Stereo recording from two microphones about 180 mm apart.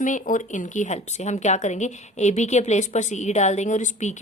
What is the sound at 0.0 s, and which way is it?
A woman's voice, 45° left (ahead or behind).